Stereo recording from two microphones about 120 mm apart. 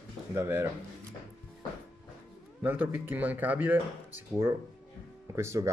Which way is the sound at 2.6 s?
15° right (ahead or behind).